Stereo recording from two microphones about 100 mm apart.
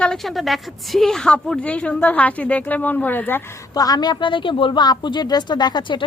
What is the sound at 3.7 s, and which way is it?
A woman's voice, 40° left (ahead or behind).